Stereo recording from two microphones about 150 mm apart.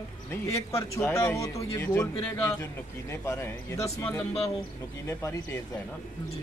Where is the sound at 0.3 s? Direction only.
20° left (ahead or behind).